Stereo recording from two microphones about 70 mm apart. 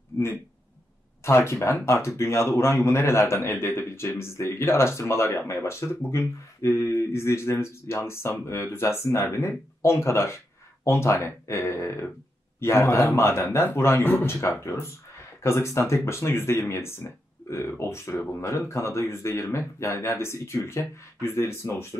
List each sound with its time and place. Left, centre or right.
1.2 s speech: left